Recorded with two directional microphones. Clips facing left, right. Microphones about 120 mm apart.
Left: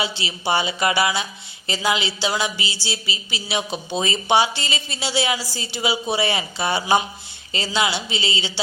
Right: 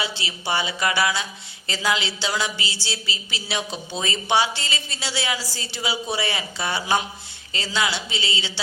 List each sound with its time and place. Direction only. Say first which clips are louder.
0.2 s a woman's voice: left 4 dB; 20° left (ahead or behind)